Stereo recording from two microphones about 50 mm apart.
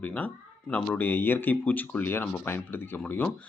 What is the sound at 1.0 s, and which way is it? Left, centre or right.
Speech, left.